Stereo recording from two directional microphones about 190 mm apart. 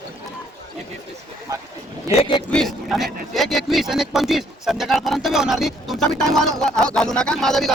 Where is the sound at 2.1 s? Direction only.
30° left (ahead or behind).